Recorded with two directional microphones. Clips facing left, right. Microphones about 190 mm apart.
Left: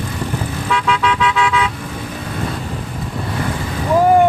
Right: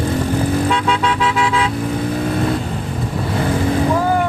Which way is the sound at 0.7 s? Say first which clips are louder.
Even; 30° right (ahead or behind).